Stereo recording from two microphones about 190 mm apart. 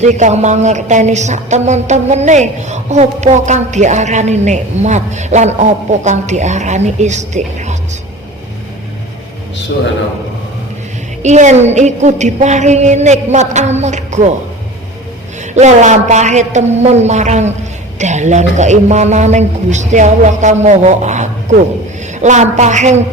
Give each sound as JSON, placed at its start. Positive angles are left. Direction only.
{"t": 0.0, "sound": "a woman's voice", "side_deg": -40}
{"t": 11.2, "sound": "a woman's voice", "side_deg": -40}
{"t": 15.5, "sound": "a woman's voice", "side_deg": -40}